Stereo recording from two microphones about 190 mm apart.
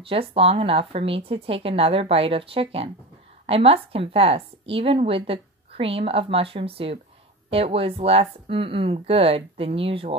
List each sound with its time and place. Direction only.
0.0 s a woman's voice: 30° right (ahead or behind)